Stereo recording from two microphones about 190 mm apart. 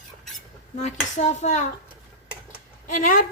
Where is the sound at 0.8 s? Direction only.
35° left (ahead or behind).